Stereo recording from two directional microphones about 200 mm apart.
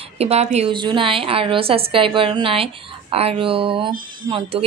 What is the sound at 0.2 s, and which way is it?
Speech, 30° right (ahead or behind).